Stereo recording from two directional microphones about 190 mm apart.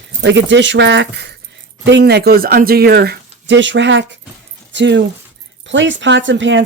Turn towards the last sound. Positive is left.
turn(degrees=-75)  # may be behind; listen again after turning